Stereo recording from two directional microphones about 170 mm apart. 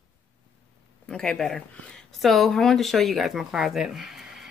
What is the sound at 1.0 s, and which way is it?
Speech, 5° left (ahead or behind).